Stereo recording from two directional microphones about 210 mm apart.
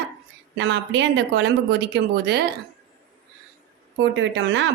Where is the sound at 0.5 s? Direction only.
55° right (ahead or behind).